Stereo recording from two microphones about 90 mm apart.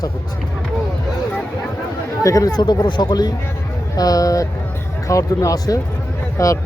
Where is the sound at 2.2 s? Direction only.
40° left (ahead or behind).